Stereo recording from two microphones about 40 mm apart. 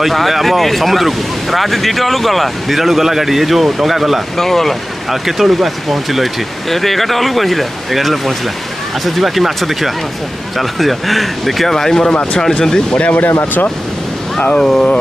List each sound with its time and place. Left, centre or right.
0.0 s speech: centre
4.4 s speech: centre
5.1 s speech: centre
13.0 s speech: left
14.6 s speech: centre